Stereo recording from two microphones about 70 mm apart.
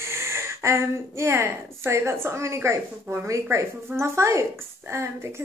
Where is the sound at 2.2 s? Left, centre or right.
Right.